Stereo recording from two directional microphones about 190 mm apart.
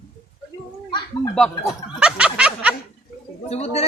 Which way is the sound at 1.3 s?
Centre (ahead or behind).